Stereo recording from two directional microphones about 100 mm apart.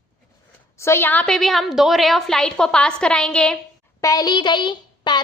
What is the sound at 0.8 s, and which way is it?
Speech, 25° left (ahead or behind).